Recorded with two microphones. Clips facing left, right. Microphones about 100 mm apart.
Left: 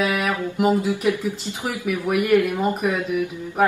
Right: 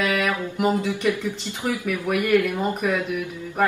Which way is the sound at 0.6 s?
10° left (ahead or behind).